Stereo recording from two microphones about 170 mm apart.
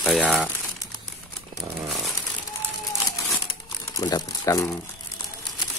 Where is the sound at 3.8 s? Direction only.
20° left (ahead or behind).